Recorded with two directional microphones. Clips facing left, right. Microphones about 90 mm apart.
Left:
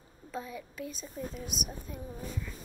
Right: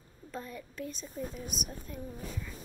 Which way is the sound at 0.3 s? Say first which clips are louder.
Left 2 dB; 5° left (ahead or behind).